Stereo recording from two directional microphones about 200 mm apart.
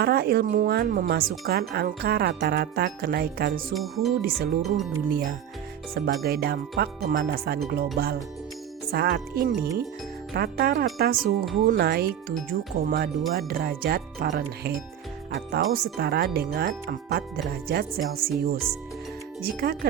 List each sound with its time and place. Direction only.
0.0 s speech: 50° right (ahead or behind)
3.8 s speech: centre (ahead or behind)
4.2 s speech: 50° right (ahead or behind)